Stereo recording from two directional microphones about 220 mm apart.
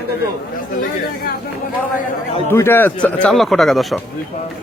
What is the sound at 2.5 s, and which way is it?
A man's voice, 10° left (ahead or behind).